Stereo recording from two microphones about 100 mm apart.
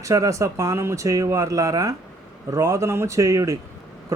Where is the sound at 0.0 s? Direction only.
30° right (ahead or behind).